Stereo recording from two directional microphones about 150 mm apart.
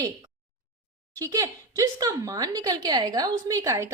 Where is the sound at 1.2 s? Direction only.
25° right (ahead or behind).